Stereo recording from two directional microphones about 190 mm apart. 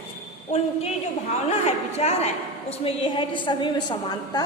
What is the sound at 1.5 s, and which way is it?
A woman's voice, 35° left (ahead or behind).